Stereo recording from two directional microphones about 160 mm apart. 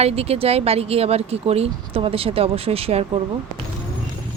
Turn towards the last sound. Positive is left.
turn(degrees=-40)  # may be behind; listen again after turning